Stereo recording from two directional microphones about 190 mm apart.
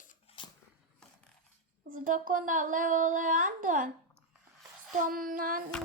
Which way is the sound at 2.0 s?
45° right (ahead or behind).